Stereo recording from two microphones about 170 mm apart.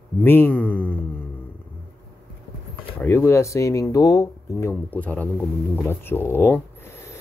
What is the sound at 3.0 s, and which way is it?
Speech, 15° left (ahead or behind).